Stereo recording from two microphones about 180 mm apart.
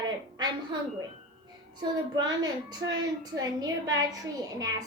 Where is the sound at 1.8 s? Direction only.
25° right (ahead or behind).